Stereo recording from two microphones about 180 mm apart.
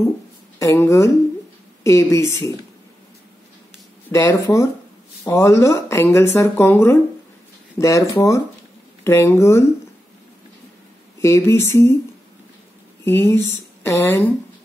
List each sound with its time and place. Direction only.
0.6 s speech: 15° left (ahead or behind)
4.1 s speech: 15° left (ahead or behind)
11.1 s speech: 15° left (ahead or behind)
13.0 s speech: 15° left (ahead or behind)